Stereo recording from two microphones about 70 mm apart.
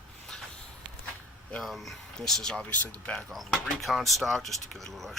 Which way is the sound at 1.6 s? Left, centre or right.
Centre.